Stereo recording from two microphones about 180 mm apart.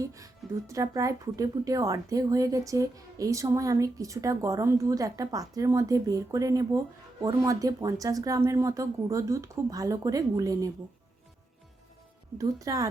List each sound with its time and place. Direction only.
0.0 s a woman's voice: 15° right (ahead or behind)
12.4 s a woman's voice: 20° right (ahead or behind)